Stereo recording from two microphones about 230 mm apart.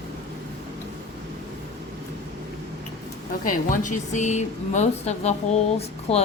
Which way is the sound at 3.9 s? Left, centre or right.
Left.